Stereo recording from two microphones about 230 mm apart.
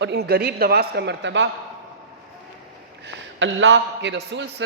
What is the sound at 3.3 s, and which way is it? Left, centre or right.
A woman's voice, right.